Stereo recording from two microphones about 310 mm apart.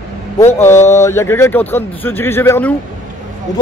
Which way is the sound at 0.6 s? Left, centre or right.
Centre.